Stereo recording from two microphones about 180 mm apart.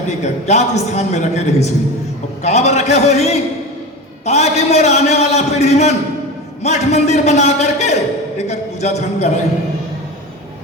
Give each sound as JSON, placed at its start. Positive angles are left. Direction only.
{"t": 0.2, "sound": "a man's voice", "side_deg": 40}